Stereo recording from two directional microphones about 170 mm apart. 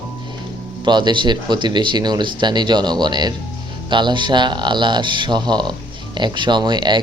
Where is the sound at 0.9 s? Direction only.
25° right (ahead or behind).